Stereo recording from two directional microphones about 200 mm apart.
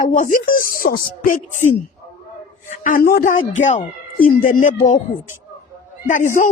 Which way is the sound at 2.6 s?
40° left (ahead or behind).